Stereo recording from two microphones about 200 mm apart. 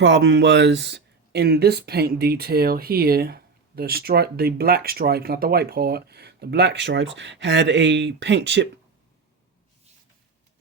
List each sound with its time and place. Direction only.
0.0 s speech: 60° right (ahead or behind)